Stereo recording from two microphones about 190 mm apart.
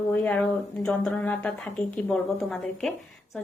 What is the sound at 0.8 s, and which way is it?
A woman's voice, 5° left (ahead or behind).